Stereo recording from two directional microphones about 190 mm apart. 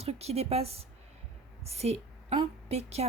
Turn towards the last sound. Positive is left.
turn(degrees=-35)  # may be behind; listen again after turning